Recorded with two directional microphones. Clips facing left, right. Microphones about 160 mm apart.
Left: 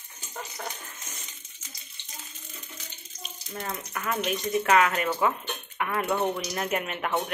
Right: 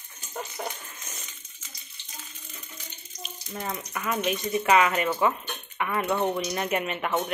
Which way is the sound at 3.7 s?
5° right (ahead or behind).